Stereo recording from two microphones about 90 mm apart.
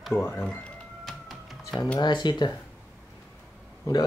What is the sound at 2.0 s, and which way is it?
Speech, 55° left (ahead or behind).